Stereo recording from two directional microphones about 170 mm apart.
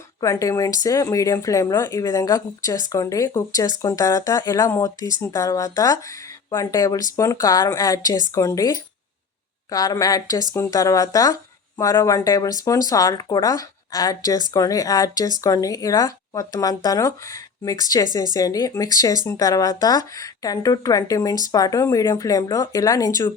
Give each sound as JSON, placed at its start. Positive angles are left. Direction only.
{"t": 0.2, "sound": "speech", "side_deg": 20}